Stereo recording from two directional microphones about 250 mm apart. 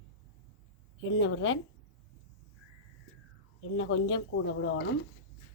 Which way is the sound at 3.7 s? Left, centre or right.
Left.